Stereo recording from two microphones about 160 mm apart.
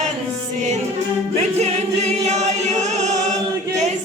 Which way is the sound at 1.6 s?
45° right (ahead or behind).